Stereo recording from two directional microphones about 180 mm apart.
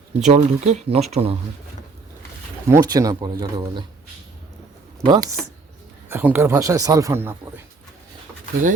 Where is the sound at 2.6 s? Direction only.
20° right (ahead or behind).